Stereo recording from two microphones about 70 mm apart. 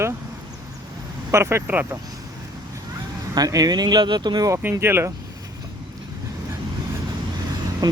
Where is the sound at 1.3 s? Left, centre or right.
Right.